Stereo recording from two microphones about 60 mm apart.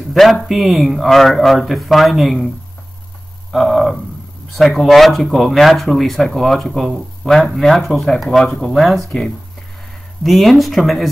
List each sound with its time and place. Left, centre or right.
0.1 s speech: centre
3.5 s a sound: centre
4.7 s speech: centre